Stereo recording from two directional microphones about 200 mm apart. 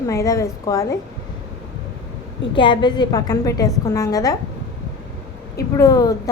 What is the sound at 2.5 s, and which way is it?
A woman's voice, 25° left (ahead or behind).